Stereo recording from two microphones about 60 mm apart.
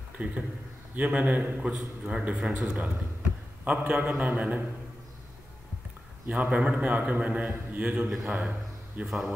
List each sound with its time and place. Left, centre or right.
0.2 s a man's voice: right
6.2 s a man's voice: right
8.3 s a sound: right
9.0 s a man's voice: centre